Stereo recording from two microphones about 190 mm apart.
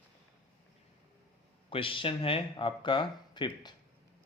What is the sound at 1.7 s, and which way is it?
Speech, 25° left (ahead or behind).